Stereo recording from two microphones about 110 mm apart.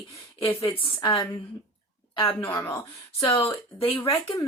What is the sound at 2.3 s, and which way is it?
Speech, 20° left (ahead or behind).